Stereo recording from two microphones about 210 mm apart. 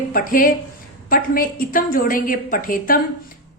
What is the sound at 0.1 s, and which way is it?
A woman's voice, 40° left (ahead or behind).